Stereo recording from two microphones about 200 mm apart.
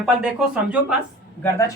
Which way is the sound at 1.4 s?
15° left (ahead or behind).